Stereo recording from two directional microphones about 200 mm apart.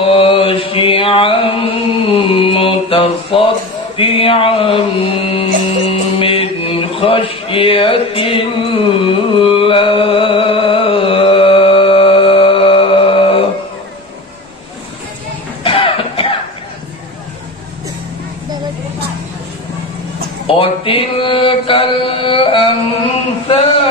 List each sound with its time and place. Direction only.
0.0 s chant: 25° left (ahead or behind)
3.9 s mantra: 25° left (ahead or behind)
15.6 s music: 25° left (ahead or behind)
20.4 s mantra: 25° left (ahead or behind)